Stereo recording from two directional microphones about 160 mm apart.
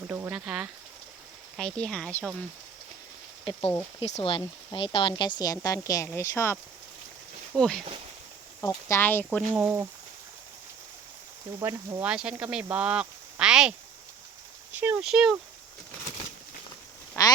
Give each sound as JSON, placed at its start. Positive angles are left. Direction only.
{"t": 0.1, "sound": "speech", "side_deg": -10}
{"t": 1.5, "sound": "speech", "side_deg": 5}
{"t": 4.0, "sound": "speech", "side_deg": 40}
{"t": 7.5, "sound": "speech", "side_deg": 5}
{"t": 8.6, "sound": "speech", "side_deg": 15}
{"t": 9.5, "sound": "speech", "side_deg": -10}
{"t": 11.6, "sound": "speech", "side_deg": -15}
{"t": 17.2, "sound": "frog", "side_deg": 20}